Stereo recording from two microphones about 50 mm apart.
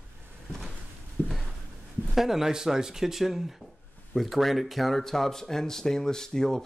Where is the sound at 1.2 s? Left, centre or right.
Left.